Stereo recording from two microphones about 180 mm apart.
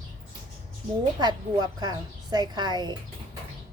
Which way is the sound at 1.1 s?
25° right (ahead or behind).